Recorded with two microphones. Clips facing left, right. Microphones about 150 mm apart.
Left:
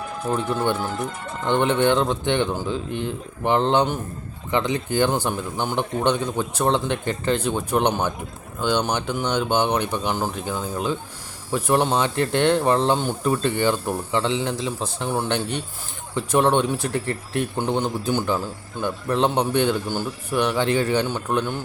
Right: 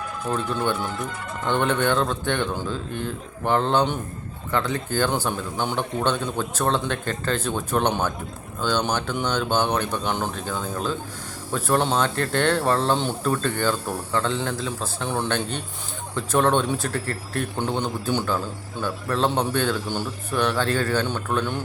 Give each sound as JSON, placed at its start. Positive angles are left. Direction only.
{"t": 0.3, "sound": "a man's voice", "side_deg": 15}